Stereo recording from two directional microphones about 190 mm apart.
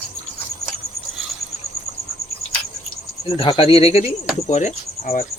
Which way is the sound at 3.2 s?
30° left (ahead or behind).